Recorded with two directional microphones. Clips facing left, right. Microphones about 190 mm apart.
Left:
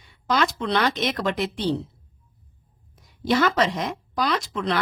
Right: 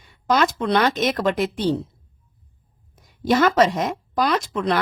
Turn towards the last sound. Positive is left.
turn(degrees=-50)  # may be behind; listen again after turning